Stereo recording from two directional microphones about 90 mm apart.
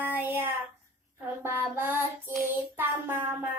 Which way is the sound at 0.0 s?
20° right (ahead or behind).